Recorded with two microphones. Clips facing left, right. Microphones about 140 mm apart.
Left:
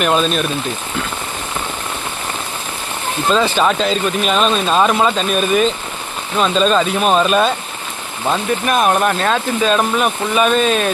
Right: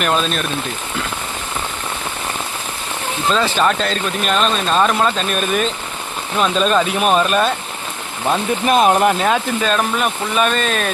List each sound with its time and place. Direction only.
0.0 s speech: 5° left (ahead or behind)
3.3 s speech: centre (ahead or behind)
8.6 s speech: 20° right (ahead or behind)
9.1 s speech: 10° right (ahead or behind)
9.6 s speech: 5° left (ahead or behind)